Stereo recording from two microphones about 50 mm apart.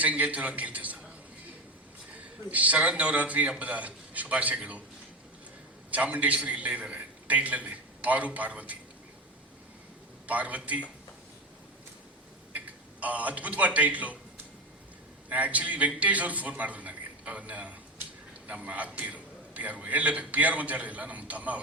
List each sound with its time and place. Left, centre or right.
0.0 s a man's voice: right
2.1 s a man's voice: right
5.9 s a man's voice: right
10.2 s a man's voice: right
12.5 s a man's voice: right
15.3 s a man's voice: right